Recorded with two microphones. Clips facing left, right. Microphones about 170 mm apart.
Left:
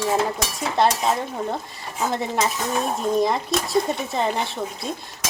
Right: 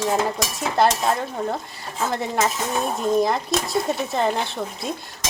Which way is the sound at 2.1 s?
Centre (ahead or behind).